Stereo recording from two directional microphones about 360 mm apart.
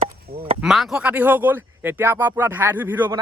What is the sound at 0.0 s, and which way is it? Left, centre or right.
Chop, right.